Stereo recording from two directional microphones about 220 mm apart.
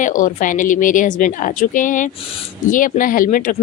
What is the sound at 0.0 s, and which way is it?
A woman's voice, 35° left (ahead or behind).